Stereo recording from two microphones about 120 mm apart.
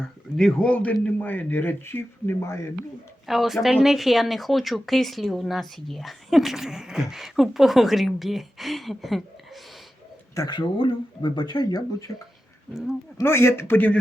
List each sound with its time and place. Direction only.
0.3 s speech: 5° left (ahead or behind); by 2.6 s 25° left (ahead or behind)
3.2 s speech: centre (ahead or behind)
10.3 s speech: 35° left (ahead or behind)
13.1 s speech: 20° left (ahead or behind)